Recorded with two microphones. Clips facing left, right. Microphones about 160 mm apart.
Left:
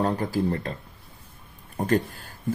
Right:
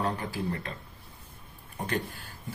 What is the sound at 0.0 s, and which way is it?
Speech, 40° left (ahead or behind).